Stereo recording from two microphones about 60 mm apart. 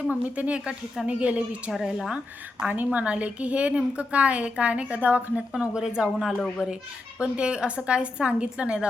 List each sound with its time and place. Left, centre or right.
0.1 s a woman's voice: right
1.7 s speech: centre
2.6 s a woman's voice: right
5.5 s a woman's voice: centre